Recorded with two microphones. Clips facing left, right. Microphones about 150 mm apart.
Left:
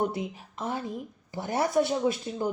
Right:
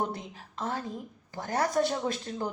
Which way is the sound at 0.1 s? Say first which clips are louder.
Left 5 dB; 10° left (ahead or behind).